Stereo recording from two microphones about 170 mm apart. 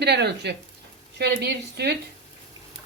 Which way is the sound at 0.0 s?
75° right (ahead or behind).